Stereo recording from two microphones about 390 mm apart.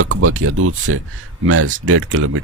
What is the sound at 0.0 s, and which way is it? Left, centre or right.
Speech, right.